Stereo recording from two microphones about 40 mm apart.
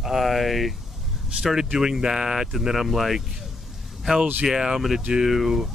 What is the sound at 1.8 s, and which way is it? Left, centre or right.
Speech, centre.